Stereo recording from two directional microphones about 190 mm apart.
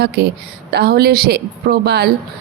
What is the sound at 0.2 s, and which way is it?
Speech, 55° right (ahead or behind).